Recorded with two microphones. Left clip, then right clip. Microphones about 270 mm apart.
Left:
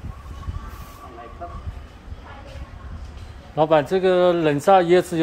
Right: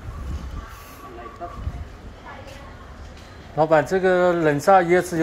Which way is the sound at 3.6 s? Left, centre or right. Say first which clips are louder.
Even; left.